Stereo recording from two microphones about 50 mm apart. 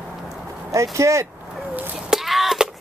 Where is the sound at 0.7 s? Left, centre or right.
Right.